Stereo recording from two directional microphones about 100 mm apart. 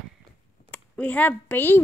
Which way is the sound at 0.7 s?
15° left (ahead or behind).